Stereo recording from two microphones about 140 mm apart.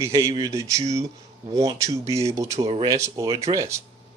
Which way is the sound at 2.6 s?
35° right (ahead or behind).